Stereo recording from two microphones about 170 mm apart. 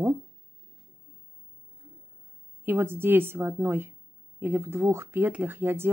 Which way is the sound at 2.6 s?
15° right (ahead or behind).